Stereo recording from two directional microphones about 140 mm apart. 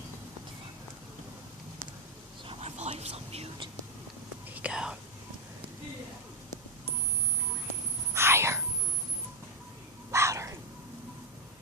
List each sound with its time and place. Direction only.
2.5 s whispering: 50° right (ahead or behind)
4.5 s speech: 5° right (ahead or behind)
8.1 s whispering: 20° right (ahead or behind)
10.1 s a sound: 20° right (ahead or behind)